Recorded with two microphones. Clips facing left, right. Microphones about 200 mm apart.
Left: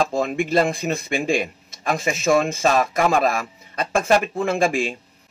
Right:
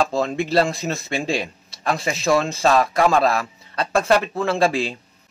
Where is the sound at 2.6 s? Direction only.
15° left (ahead or behind).